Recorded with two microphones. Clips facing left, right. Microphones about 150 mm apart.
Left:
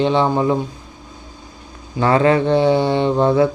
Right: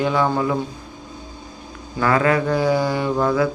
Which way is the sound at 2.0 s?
25° left (ahead or behind).